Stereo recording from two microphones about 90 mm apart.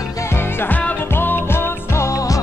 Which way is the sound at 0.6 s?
20° left (ahead or behind).